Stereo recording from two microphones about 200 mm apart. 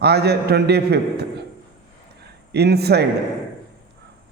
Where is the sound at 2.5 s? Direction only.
55° right (ahead or behind).